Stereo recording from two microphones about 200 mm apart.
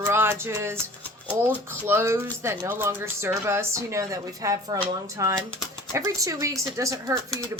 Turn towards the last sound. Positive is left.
turn(degrees=-15)  # may be behind; listen again after turning